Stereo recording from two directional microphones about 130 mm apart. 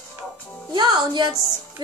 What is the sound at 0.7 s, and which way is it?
Speech, 35° right (ahead or behind).